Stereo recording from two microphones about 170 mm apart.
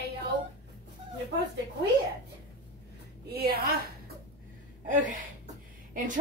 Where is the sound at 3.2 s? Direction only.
70° right (ahead or behind).